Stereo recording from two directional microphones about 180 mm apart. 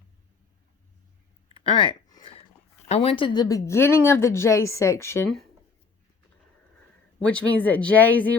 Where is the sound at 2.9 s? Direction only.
30° left (ahead or behind); by 5.3 s 15° left (ahead or behind).